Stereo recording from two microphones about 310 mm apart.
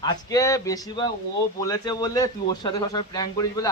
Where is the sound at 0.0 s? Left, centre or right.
Centre.